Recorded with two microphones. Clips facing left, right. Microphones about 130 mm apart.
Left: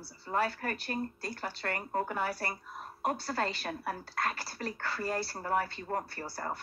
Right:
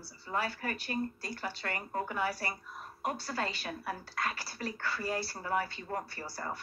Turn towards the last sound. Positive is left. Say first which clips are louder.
# left 2 dB
turn(degrees=55)  # may be behind; listen again after turning